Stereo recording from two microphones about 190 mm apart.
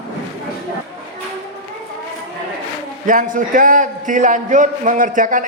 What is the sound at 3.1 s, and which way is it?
A man's voice, 45° right (ahead or behind).